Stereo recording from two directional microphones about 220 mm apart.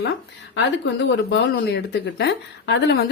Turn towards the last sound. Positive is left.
turn(degrees=50)  # may be behind; listen again after turning